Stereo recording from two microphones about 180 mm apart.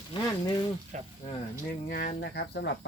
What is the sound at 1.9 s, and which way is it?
Speech, 60° left (ahead or behind).